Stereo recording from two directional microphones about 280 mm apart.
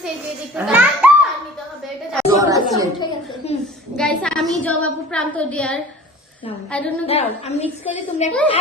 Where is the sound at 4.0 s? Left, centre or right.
Centre.